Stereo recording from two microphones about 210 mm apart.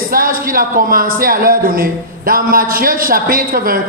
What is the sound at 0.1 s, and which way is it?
Speech, 45° right (ahead or behind).